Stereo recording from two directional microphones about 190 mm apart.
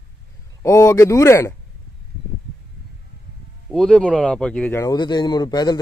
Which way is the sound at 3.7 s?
5° left (ahead or behind).